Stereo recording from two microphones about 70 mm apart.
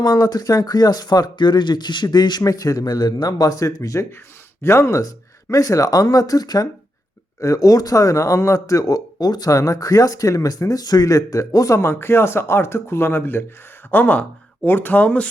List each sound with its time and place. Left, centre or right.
0.0 s speech: left
2.4 s speech: left
9.5 s speech: left; by 15.3 s centre